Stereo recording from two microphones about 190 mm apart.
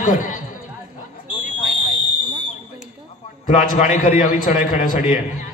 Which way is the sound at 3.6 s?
45° left (ahead or behind).